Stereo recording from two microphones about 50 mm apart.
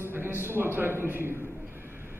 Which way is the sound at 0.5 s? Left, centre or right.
Right.